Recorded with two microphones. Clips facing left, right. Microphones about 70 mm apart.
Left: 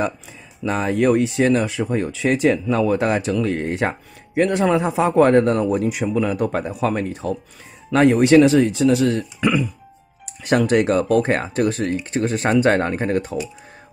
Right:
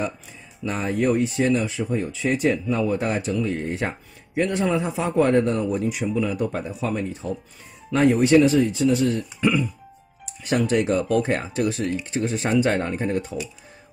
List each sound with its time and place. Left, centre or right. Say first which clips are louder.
0.7 s a man's voice: left 4 dB; left
7.9 s speech: left 4 dB; left